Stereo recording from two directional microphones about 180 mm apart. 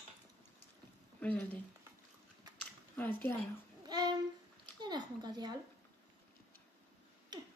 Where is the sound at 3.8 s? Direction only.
20° right (ahead or behind).